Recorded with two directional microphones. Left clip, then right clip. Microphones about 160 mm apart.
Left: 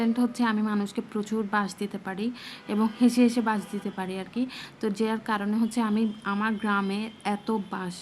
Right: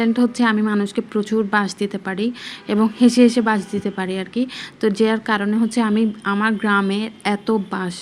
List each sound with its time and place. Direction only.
0.0 s a woman's voice: 20° right (ahead or behind)